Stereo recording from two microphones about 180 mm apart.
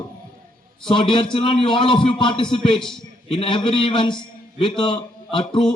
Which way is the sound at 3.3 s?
30° left (ahead or behind).